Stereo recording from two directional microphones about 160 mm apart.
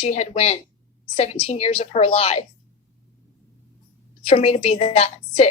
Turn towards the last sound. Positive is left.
turn(degrees=40)  # may be behind; listen again after turning